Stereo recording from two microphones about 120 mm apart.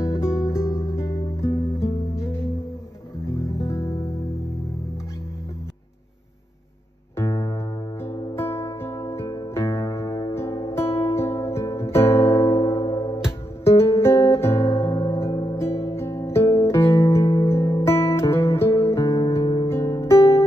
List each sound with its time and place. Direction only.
0.0 s music: 25° left (ahead or behind)
3.5 s music: 25° left (ahead or behind)
7.2 s music: 30° left (ahead or behind)
19.7 s music: 25° left (ahead or behind)